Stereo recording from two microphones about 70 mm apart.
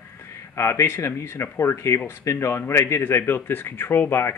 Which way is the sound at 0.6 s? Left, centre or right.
Left.